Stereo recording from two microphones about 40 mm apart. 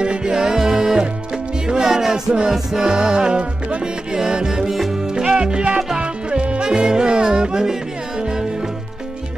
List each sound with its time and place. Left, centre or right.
0.0 s music: right
4.7 s music: centre
5.0 s music: centre